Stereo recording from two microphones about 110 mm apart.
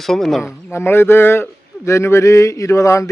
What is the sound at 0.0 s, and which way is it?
Speech, 5° left (ahead or behind).